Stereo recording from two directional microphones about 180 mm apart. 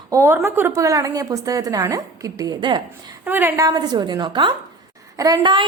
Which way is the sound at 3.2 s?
10° right (ahead or behind).